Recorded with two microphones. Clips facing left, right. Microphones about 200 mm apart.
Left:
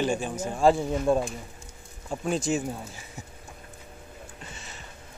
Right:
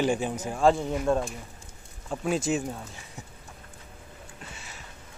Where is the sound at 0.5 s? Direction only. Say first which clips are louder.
Left 1 dB; 5° left (ahead or behind).